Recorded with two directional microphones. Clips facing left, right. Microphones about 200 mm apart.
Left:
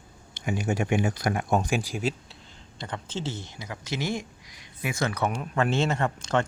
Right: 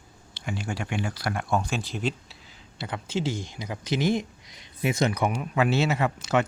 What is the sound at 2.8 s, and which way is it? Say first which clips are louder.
Speech: right 4 dB; 10° right (ahead or behind).